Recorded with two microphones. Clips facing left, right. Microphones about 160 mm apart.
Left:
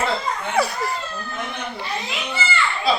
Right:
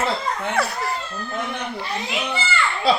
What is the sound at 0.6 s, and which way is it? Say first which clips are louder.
Speech: left 4 dB; centre (ahead or behind).